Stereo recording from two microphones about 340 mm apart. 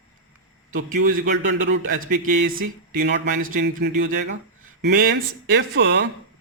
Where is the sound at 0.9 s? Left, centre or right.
Right.